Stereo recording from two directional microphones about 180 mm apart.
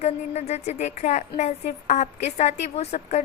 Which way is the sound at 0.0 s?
35° left (ahead or behind).